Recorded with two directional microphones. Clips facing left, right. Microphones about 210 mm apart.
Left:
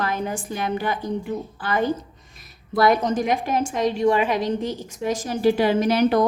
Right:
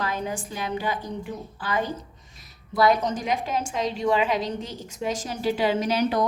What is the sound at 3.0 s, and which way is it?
A woman's voice, 50° left (ahead or behind).